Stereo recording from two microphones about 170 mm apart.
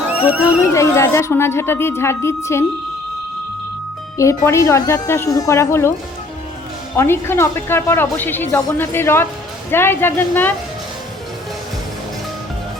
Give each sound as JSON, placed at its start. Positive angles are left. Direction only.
{"t": 0.4, "sound": "speech", "side_deg": 15}
{"t": 4.2, "sound": "speech", "side_deg": 15}
{"t": 6.9, "sound": "speech", "side_deg": 15}